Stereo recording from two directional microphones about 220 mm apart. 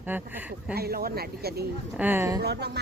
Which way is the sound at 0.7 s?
45° right (ahead or behind).